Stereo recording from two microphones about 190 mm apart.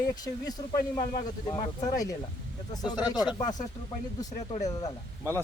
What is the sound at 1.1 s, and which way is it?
Speech, 25° left (ahead or behind).